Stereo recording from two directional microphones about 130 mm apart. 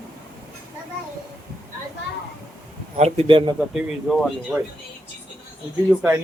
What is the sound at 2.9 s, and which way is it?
Speech, 55° right (ahead or behind).